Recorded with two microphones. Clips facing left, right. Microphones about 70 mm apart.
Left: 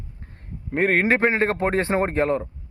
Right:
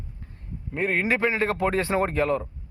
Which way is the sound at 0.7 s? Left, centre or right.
Left.